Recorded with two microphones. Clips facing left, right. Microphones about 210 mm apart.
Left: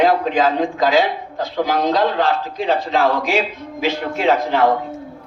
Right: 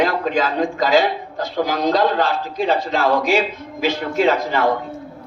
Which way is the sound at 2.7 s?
55° left (ahead or behind).